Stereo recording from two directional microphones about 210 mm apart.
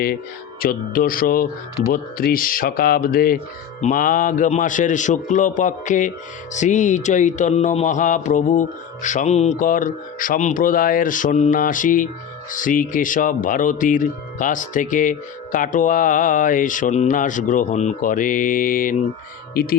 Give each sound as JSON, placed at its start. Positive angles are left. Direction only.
{"t": 0.6, "sound": "speech", "side_deg": 45}
{"t": 3.8, "sound": "music", "side_deg": 35}